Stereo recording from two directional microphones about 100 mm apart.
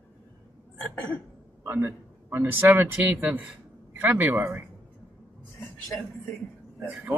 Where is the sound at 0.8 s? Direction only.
15° left (ahead or behind).